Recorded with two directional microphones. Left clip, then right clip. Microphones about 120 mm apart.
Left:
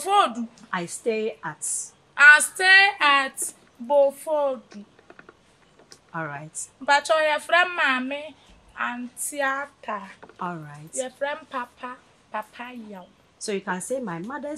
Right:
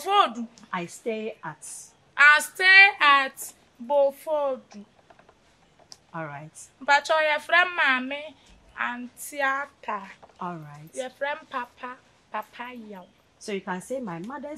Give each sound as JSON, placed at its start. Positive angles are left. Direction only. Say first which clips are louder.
{"t": 0.0, "sound": "a woman's voice", "louder": "left 1 dB", "side_deg": -5}
{"t": 0.7, "sound": "a woman's voice", "louder": "left 4 dB", "side_deg": 30}
{"t": 2.1, "sound": "a woman's voice", "louder": "left 3 dB", "side_deg": -5}
{"t": 6.1, "sound": "a woman's voice", "louder": "left 4 dB", "side_deg": 25}
{"t": 6.9, "sound": "a woman's voice", "louder": "left 1 dB", "side_deg": -5}
{"t": 10.4, "sound": "a woman's voice", "louder": "left 3 dB", "side_deg": 25}
{"t": 11.0, "sound": "a woman's voice", "louder": "left 2 dB", "side_deg": -10}
{"t": 13.4, "sound": "a woman's voice", "louder": "left 3 dB", "side_deg": 30}